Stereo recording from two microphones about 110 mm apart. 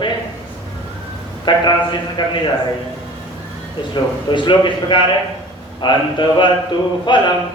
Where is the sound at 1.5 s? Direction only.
45° left (ahead or behind).